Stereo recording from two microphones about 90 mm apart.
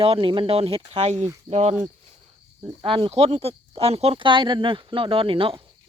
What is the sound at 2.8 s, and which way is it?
Speech, 80° right.